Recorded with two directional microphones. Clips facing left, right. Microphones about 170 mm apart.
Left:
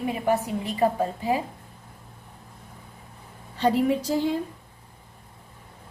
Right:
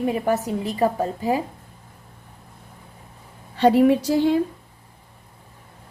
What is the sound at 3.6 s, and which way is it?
Speech, 70° right (ahead or behind).